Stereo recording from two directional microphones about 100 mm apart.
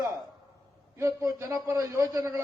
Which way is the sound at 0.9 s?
35° right (ahead or behind).